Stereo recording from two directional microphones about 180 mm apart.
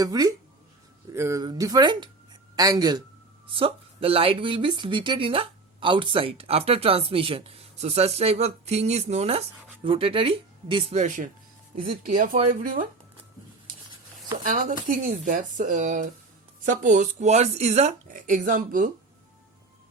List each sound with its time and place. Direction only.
0.0 s speech: 20° right (ahead or behind)
11.0 s speech: 45° right (ahead or behind)
14.4 s speech: 50° right (ahead or behind)